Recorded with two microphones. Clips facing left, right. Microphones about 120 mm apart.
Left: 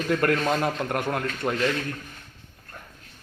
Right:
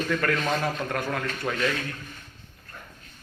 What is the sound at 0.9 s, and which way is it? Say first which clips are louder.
Speech: left 2 dB; 50° left (ahead or behind).